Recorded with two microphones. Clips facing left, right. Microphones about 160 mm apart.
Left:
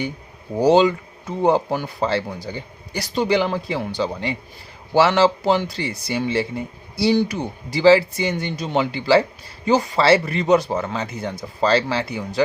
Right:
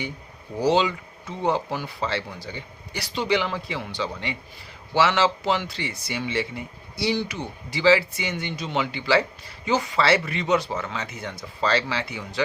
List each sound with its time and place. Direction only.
0.6 s speech: 45° left (ahead or behind)